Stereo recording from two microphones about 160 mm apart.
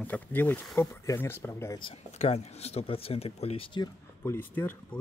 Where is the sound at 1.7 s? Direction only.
35° left (ahead or behind).